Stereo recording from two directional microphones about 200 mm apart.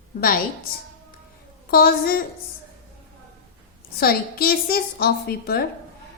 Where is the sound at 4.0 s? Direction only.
50° left (ahead or behind).